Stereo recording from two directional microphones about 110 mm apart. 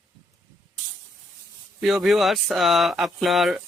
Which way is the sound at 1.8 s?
Centre (ahead or behind).